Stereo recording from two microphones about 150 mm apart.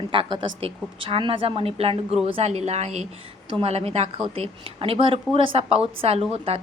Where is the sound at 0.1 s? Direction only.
35° right (ahead or behind).